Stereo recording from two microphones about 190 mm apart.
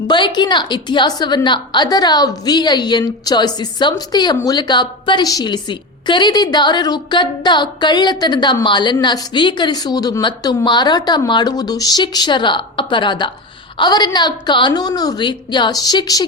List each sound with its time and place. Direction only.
0.1 s a woman's voice: 25° left (ahead or behind)